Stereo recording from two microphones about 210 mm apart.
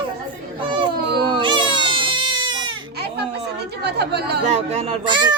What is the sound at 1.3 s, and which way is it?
Baby cry, 20° right (ahead or behind).